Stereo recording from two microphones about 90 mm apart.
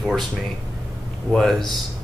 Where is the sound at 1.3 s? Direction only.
5° left (ahead or behind).